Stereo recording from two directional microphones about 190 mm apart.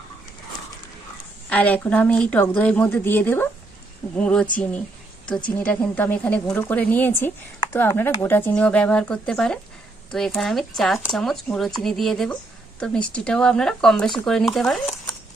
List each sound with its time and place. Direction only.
1.5 s speech: 10° left (ahead or behind)